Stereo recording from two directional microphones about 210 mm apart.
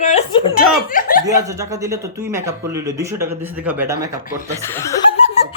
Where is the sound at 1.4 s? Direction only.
15° right (ahead or behind).